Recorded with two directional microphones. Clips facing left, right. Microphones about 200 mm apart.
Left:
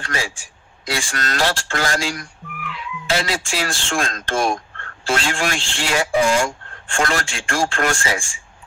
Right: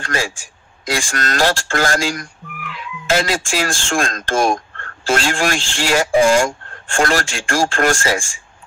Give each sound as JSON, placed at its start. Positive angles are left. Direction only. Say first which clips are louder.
{"t": 0.0, "sound": "speech", "louder": "right 4 dB", "side_deg": -45}